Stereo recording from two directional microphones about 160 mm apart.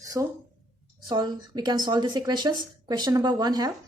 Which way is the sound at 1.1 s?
25° right (ahead or behind).